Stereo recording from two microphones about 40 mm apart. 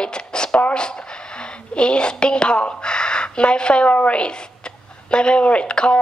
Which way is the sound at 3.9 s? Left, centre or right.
Left.